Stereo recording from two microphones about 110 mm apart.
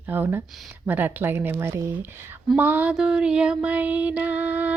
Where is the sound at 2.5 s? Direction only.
15° right (ahead or behind).